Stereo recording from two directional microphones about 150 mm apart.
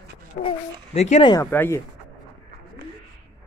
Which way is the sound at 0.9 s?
50° left (ahead or behind).